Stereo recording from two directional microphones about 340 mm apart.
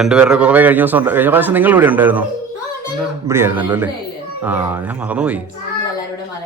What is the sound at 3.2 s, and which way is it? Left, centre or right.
Speech, centre.